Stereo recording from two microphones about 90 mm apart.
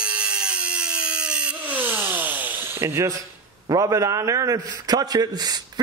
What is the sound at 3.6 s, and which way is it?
A man's voice, 35° right (ahead or behind).